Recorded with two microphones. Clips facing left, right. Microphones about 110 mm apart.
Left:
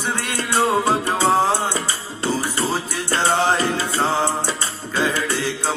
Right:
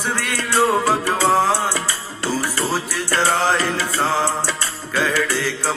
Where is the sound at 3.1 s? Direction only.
25° left (ahead or behind).